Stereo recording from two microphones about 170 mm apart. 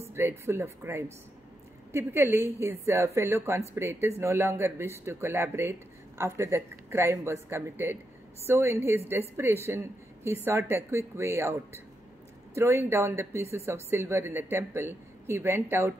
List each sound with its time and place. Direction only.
0.1 s speech: 15° right (ahead or behind)
12.5 s speech: 15° right (ahead or behind)